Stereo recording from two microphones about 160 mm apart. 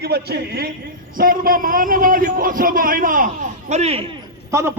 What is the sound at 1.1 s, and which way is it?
A man's voice, 60° right (ahead or behind).